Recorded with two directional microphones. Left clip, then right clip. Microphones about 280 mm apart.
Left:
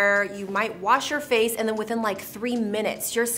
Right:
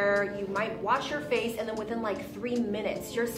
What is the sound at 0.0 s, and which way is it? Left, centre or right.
A woman's voice, left.